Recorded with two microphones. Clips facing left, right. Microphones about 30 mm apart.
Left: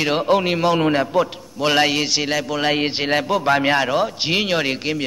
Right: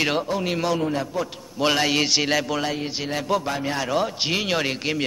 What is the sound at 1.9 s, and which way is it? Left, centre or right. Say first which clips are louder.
Speech: left 1 dB; centre.